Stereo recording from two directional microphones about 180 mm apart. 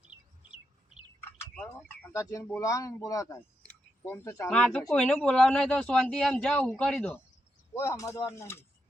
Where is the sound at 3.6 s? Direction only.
15° left (ahead or behind).